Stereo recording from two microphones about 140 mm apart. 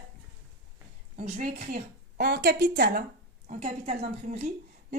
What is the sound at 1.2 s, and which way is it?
A woman's voice, 55° right (ahead or behind).